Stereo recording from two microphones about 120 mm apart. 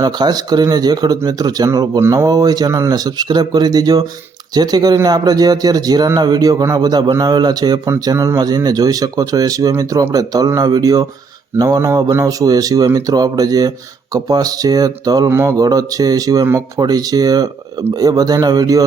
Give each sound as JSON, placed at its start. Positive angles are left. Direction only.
{"t": 0.0, "sound": "speech", "side_deg": -35}